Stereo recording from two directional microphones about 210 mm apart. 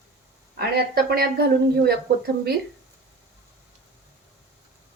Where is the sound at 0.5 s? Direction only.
45° right (ahead or behind).